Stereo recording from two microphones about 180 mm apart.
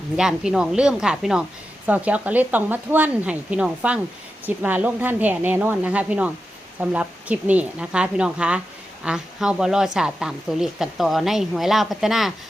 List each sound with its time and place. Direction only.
0.2 s a woman's voice: 5° right (ahead or behind)